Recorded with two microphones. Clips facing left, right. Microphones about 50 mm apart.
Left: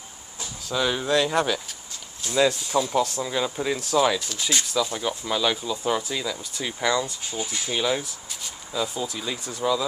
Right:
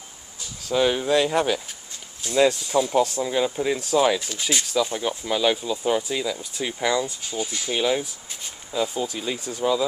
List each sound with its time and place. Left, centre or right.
0.7 s speech: right
9.6 s speech: centre